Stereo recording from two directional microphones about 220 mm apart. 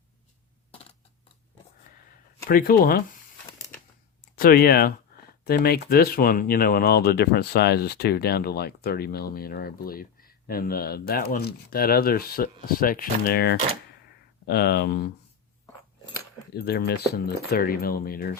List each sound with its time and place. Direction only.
2.5 s speech: 40° left (ahead or behind)
4.4 s speech: 45° left (ahead or behind)
16.6 s speech: 45° left (ahead or behind)